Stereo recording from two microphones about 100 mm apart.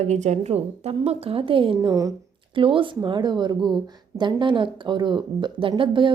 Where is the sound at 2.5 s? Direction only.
60° right (ahead or behind).